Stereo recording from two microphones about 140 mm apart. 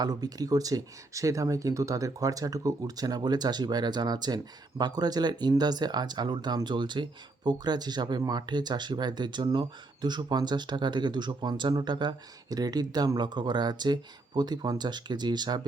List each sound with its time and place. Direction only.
0.0 s speech: 30° right (ahead or behind)